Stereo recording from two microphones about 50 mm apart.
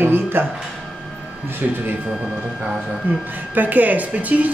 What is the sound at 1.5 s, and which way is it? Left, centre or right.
Speech, right.